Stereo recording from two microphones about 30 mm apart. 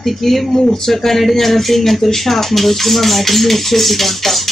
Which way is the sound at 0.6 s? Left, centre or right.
Centre.